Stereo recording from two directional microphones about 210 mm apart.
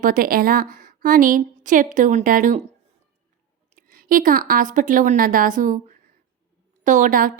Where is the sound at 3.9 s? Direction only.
45° right (ahead or behind).